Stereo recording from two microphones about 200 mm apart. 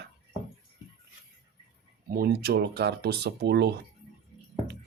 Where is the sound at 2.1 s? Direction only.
50° right (ahead or behind).